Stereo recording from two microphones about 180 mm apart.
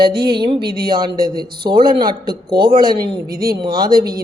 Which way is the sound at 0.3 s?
30° right (ahead or behind).